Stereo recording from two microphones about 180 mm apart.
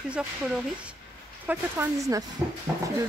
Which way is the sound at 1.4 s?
15° right (ahead or behind).